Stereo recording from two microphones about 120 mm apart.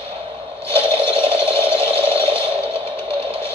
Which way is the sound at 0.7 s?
50° right (ahead or behind).